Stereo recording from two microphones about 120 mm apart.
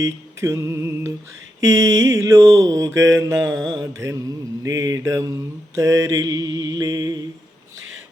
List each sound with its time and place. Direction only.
0.0 s mantra: 25° right (ahead or behind)